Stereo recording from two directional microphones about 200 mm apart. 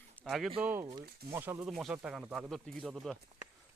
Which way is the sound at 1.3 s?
10° right (ahead or behind).